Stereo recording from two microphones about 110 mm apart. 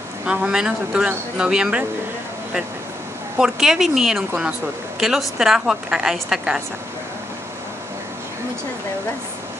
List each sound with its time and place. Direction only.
0.2 s speech: 10° right (ahead or behind)
3.3 s a woman's voice: 5° right (ahead or behind)
4.3 s speech: 20° right (ahead or behind)
5.0 s a woman's voice: 5° right (ahead or behind)